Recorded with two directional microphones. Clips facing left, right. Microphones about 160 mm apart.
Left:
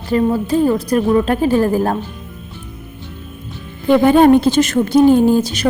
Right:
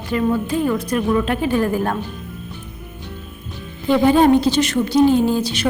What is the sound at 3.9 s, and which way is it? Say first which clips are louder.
A woman's voice: left 4 dB; 55° left (ahead or behind).